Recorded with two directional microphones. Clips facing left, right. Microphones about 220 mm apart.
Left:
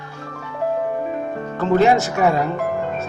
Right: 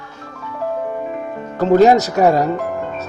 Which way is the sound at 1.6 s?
40° right (ahead or behind).